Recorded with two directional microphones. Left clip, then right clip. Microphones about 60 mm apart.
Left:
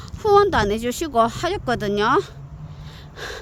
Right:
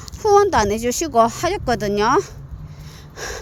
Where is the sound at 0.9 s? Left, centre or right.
Centre.